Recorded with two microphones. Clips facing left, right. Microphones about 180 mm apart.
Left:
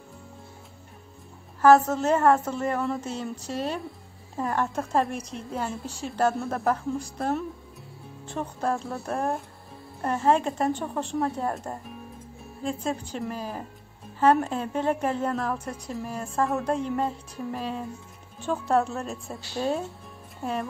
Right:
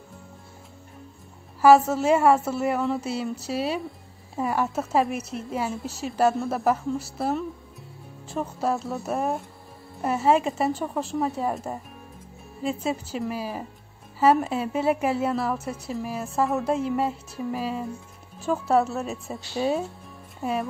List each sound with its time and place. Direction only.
1.6 s a woman's voice: 10° right (ahead or behind)